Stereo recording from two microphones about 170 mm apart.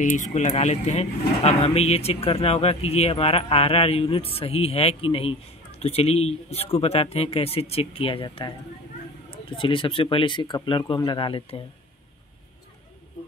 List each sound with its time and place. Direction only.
0.0 s speech: 45° left (ahead or behind); by 11.6 s 30° left (ahead or behind)